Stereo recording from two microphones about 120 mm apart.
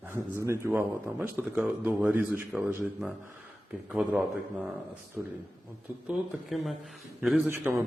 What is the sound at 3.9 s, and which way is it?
Speech, 10° right (ahead or behind).